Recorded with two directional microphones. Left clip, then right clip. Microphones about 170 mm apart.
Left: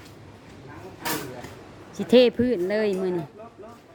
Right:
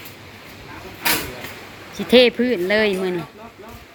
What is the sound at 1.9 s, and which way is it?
Speech, 25° left (ahead or behind).